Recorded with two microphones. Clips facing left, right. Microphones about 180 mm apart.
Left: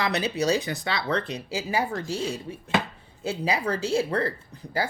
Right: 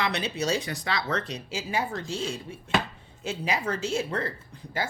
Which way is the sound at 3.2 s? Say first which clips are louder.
Left 3 dB; 35° left (ahead or behind).